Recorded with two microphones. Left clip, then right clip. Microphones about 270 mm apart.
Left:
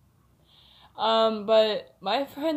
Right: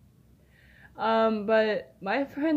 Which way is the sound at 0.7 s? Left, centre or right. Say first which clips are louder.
Left 2 dB; centre.